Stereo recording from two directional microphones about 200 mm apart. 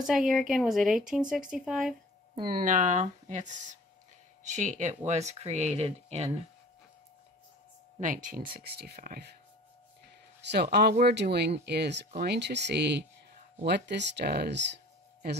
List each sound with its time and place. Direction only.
0.0 s speech: centre (ahead or behind)
2.4 s speech: 45° right (ahead or behind)
8.0 s speech: 40° right (ahead or behind)
10.4 s speech: 55° right (ahead or behind)